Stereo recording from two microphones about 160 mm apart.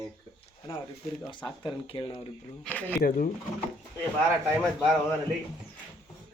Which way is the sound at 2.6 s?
10° left (ahead or behind).